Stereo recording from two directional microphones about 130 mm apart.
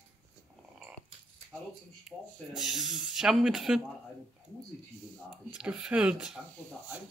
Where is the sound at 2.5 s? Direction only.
5° right (ahead or behind).